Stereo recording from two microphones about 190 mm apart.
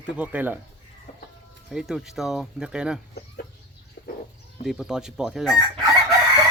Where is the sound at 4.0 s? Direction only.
60° left (ahead or behind).